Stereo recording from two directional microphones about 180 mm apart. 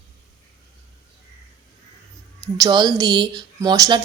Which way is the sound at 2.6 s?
20° right (ahead or behind).